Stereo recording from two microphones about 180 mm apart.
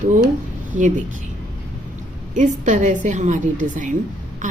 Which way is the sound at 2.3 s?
45° right (ahead or behind).